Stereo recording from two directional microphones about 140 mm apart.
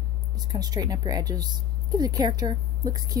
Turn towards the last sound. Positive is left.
turn(degrees=-25)  # may be behind; listen again after turning